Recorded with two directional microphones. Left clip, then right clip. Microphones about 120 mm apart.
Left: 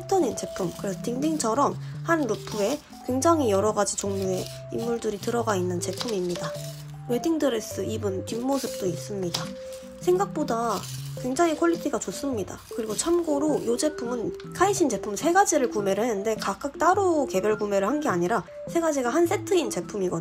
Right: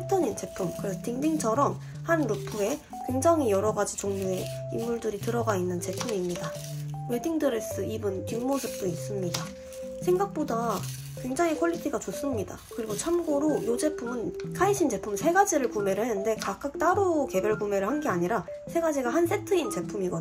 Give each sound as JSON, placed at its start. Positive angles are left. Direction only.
{"t": 0.1, "sound": "speech", "side_deg": 15}